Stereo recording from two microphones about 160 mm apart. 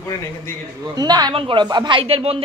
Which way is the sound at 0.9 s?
25° right (ahead or behind).